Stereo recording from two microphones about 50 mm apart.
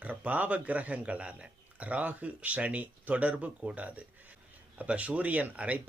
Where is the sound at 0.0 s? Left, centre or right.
Right.